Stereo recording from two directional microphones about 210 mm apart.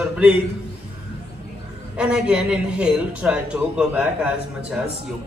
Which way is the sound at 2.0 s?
5° right (ahead or behind).